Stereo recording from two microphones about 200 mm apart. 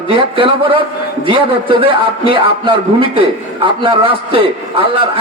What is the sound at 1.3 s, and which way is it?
A man's voice, 25° right (ahead or behind).